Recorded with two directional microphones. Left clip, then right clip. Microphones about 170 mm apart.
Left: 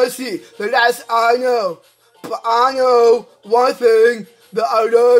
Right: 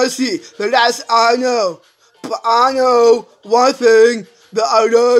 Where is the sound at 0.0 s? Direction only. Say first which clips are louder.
Right 1 dB; 30° right (ahead or behind).